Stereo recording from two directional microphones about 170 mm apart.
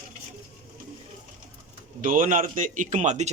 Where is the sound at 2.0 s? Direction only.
50° right (ahead or behind).